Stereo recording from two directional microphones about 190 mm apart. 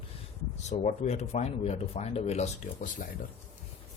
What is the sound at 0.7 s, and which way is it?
Speech, 40° left (ahead or behind).